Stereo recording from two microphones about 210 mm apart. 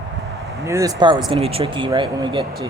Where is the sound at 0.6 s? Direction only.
15° right (ahead or behind).